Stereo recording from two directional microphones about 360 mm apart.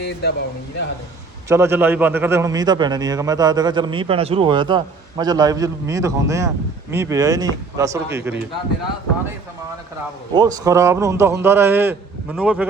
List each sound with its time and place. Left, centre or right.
0.0 s speech: left
1.5 s a man's voice: centre
10.3 s a man's voice: centre